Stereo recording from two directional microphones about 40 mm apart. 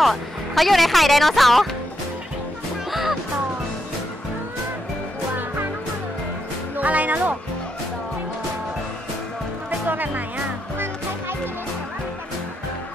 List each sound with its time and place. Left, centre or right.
0.0 s speech: centre
2.9 s music: centre
6.8 s speech: right
9.8 s music: right